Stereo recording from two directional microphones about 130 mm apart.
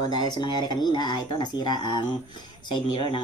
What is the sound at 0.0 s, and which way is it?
Speech, 30° left (ahead or behind).